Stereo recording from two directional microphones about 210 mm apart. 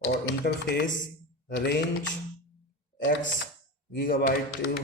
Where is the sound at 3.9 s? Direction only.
45° left (ahead or behind).